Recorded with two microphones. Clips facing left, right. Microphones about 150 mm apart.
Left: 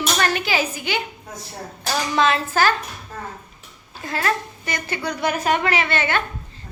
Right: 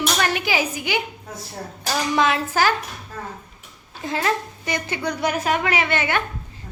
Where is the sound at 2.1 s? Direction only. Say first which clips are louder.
Left 1 dB; 15° right (ahead or behind).